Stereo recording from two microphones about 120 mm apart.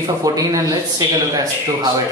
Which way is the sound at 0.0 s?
30° right (ahead or behind).